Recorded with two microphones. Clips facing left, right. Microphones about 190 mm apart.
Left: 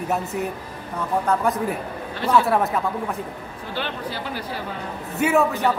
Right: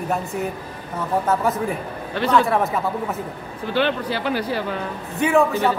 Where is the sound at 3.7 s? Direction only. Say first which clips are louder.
Right 8 dB; 80° right.